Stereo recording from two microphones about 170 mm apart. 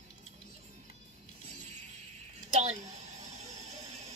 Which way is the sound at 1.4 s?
40° right (ahead or behind).